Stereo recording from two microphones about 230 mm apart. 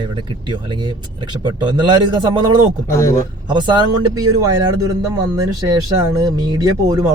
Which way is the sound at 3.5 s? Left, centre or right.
Centre.